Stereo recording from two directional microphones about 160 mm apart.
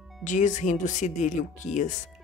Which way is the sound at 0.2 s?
50° left (ahead or behind).